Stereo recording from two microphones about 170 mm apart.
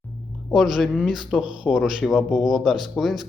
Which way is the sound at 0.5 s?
Centre (ahead or behind).